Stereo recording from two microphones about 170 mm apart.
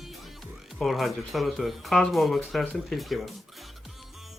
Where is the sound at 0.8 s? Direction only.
Centre (ahead or behind).